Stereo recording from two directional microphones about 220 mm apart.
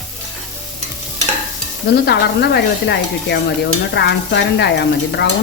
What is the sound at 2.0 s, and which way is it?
Speech, 50° left (ahead or behind).